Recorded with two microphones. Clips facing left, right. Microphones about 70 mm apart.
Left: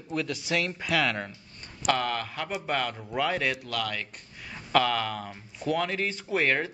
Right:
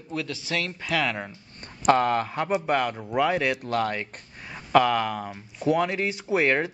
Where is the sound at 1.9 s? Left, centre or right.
Right.